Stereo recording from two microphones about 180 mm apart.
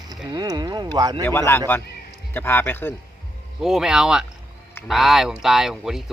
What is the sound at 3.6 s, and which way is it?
Speech, centre (ahead or behind).